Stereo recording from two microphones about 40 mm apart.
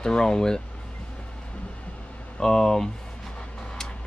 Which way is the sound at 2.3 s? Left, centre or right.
Centre.